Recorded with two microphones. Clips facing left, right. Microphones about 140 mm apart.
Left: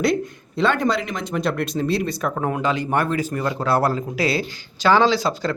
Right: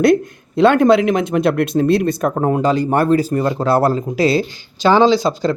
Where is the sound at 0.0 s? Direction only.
55° right (ahead or behind).